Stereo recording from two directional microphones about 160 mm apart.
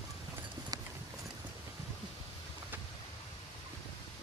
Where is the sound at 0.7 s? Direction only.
25° right (ahead or behind).